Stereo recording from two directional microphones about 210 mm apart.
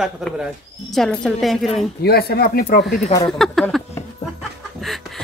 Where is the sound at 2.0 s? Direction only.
50° left (ahead or behind).